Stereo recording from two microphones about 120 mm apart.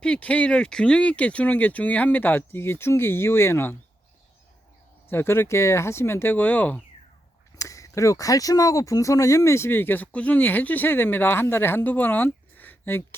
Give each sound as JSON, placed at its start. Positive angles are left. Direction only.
{"t": 0.0, "sound": "speech", "side_deg": 10}
{"t": 5.0, "sound": "speech", "side_deg": 20}
{"t": 7.6, "sound": "speech", "side_deg": 25}